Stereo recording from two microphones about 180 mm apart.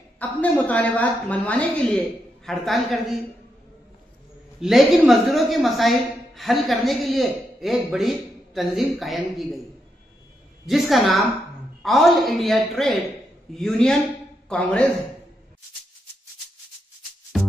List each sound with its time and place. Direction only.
0.2 s a woman's voice: 10° left (ahead or behind)
4.6 s a man's voice: centre (ahead or behind)
10.7 s a man's voice: centre (ahead or behind)
17.3 s music: centre (ahead or behind)